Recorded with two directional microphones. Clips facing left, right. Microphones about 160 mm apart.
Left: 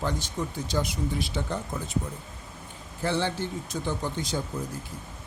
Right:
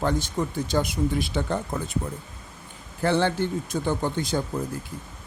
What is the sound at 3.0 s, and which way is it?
Speech, 55° right (ahead or behind).